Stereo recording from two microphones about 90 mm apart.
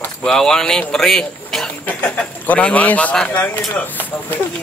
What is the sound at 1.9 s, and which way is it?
Speech, 15° left (ahead or behind).